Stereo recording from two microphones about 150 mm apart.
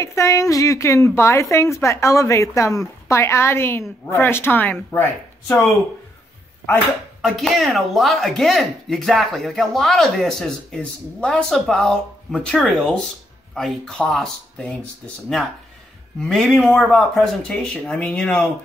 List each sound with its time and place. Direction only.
0.0 s a woman's voice: 20° left (ahead or behind)
7.2 s speech: centre (ahead or behind)